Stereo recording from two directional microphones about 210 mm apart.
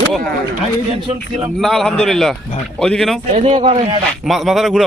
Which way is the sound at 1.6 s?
Centre (ahead or behind).